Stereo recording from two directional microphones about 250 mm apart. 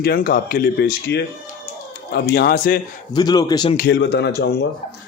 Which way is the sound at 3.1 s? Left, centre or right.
Centre.